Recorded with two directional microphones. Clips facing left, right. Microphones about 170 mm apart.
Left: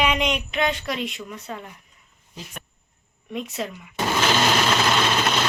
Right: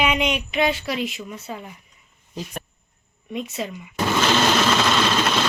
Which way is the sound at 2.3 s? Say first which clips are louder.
Right 7 dB; 40° right (ahead or behind).